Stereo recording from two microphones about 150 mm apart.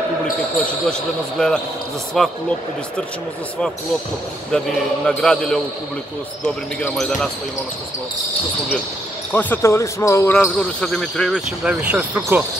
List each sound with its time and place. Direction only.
1.4 s speech: 5° left (ahead or behind)
4.5 s speech: 5° left (ahead or behind)
9.3 s speech: 10° left (ahead or behind)
10.3 s speech: 5° left (ahead or behind)
11.6 s speech: 10° right (ahead or behind)